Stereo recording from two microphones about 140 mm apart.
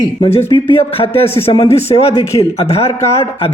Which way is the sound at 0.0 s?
35° left (ahead or behind).